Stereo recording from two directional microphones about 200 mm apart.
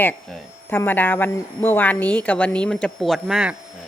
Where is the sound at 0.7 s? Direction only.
10° left (ahead or behind).